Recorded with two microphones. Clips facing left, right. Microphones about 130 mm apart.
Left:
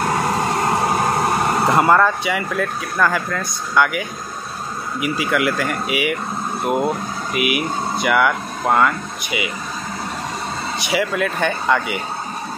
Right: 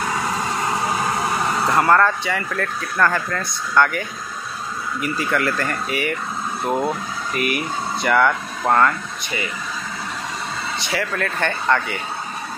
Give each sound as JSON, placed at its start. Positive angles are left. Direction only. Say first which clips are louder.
{"t": 0.0, "sound": "vehicle", "louder": "left 4 dB", "side_deg": 50}
{"t": 1.6, "sound": "speech", "louder": "left 1 dB", "side_deg": 20}
{"t": 5.0, "sound": "speech", "louder": "left 2 dB", "side_deg": 5}
{"t": 10.8, "sound": "speech", "louder": "left 5 dB", "side_deg": 15}